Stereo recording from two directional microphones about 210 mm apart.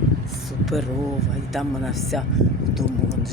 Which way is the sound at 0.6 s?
Centre (ahead or behind).